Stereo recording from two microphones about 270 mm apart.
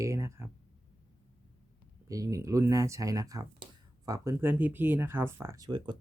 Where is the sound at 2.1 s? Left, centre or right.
Centre.